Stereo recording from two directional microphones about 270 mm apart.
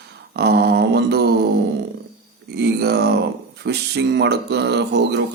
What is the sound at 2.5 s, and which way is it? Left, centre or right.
Mantra, right.